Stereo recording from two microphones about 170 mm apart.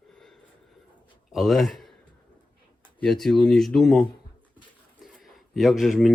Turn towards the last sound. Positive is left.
turn(degrees=0)  # may be behind; listen again after turning